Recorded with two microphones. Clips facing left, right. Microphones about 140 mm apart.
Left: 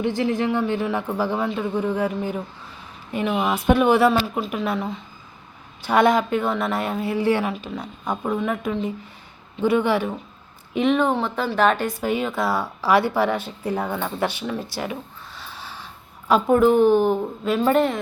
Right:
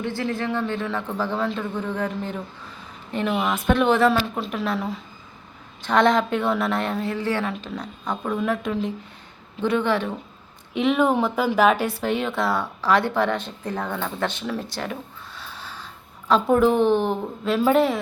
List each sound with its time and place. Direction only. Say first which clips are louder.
0.0 s a woman's voice: left 4 dB; 15° left (ahead or behind)
7.5 s a woman's voice: left 1 dB; 5° left (ahead or behind)
10.8 s a woman's voice: even; 5° right (ahead or behind)
15.4 s snort: left 1 dB; centre (ahead or behind)
16.3 s a woman's voice: left 2 dB; centre (ahead or behind)